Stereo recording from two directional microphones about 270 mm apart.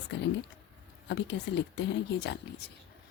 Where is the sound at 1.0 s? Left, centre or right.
Left.